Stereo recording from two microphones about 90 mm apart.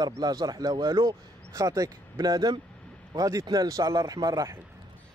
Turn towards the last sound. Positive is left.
turn(degrees=-45)  # may be behind; listen again after turning